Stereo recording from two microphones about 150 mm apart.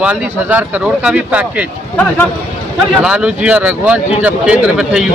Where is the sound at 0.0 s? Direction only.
10° right (ahead or behind).